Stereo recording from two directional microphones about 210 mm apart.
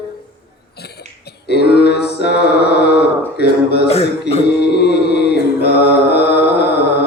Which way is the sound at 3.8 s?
30° left (ahead or behind).